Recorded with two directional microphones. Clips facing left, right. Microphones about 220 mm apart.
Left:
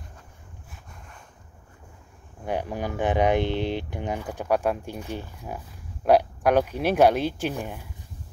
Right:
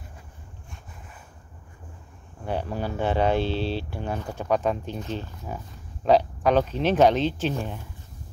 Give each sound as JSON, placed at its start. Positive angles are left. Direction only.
{"t": 2.4, "sound": "speech", "side_deg": 15}